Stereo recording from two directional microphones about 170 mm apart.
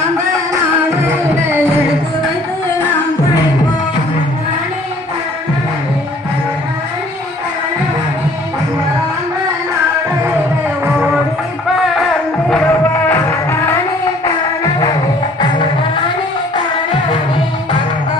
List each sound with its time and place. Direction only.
0.5 s music: 15° right (ahead or behind)
12.5 s music: 5° left (ahead or behind)
14.3 s music: 20° left (ahead or behind)